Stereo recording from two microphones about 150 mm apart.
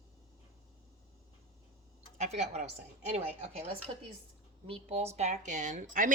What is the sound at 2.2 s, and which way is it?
Speech, 50° right (ahead or behind).